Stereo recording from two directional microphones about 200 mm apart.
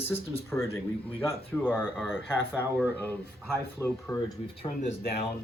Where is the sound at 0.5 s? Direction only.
15° left (ahead or behind).